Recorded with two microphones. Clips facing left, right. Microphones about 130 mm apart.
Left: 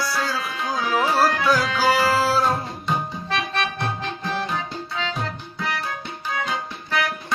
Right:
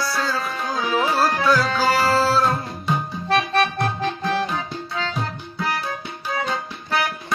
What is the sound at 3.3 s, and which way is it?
Music, 40° right (ahead or behind).